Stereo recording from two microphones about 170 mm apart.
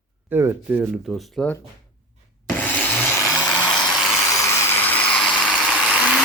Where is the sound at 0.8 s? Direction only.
Centre (ahead or behind).